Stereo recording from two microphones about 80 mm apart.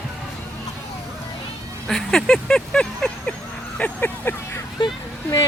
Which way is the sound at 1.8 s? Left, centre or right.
Centre.